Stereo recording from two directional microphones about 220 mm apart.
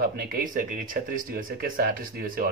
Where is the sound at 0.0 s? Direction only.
45° right (ahead or behind).